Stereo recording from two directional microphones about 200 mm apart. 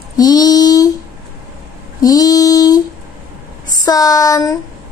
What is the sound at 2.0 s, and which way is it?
Female singing, 20° left (ahead or behind).